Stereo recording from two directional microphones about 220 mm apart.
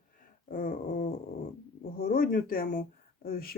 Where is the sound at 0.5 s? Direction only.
40° left (ahead or behind).